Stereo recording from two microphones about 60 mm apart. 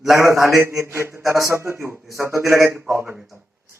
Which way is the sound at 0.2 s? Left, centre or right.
Right.